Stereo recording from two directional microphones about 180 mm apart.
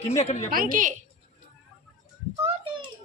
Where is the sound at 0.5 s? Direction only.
50° right (ahead or behind).